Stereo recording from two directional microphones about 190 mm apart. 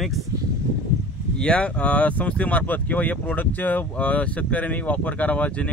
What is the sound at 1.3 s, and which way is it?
Speech, 5° left (ahead or behind).